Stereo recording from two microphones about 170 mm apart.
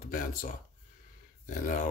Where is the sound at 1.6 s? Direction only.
50° left (ahead or behind).